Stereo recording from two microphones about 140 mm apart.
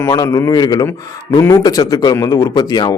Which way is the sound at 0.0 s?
25° left (ahead or behind).